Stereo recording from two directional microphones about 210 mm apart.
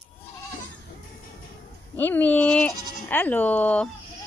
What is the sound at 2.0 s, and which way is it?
Speech, 10° left (ahead or behind).